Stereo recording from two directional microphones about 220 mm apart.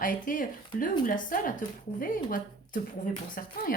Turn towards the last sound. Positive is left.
turn(degrees=40)  # may be behind; listen again after turning